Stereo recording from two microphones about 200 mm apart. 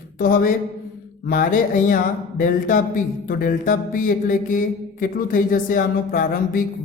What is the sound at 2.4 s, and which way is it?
Speech, 40° left (ahead or behind).